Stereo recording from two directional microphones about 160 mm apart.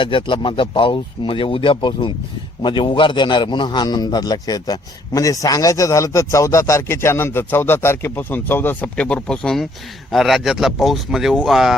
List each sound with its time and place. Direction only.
0.0 s a man's voice: 30° left (ahead or behind); by 11.8 s centre (ahead or behind)